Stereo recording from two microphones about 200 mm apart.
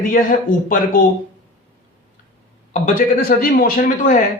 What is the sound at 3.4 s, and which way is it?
Speech, 45° left (ahead or behind).